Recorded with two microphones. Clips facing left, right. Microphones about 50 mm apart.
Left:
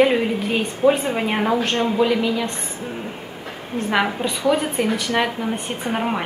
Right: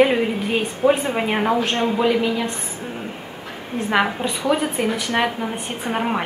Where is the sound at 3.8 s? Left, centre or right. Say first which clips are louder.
Right 1 dB; centre.